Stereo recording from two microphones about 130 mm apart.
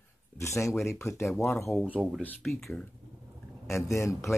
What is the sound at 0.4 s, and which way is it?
Speech, 20° left (ahead or behind).